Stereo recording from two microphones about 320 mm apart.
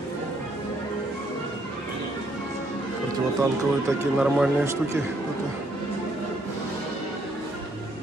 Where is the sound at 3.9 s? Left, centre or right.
Centre.